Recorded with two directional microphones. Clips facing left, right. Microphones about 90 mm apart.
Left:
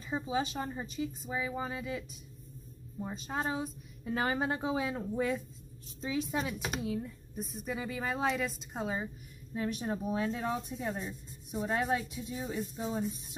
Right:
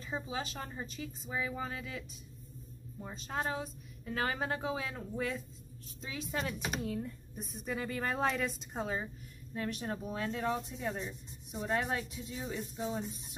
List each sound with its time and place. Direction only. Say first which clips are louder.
0.0 s a woman's voice: left 5 dB; 20° left (ahead or behind)
6.3 s a woman's voice: left 2 dB; 5° left (ahead or behind); by 13.4 s 20° left (ahead or behind)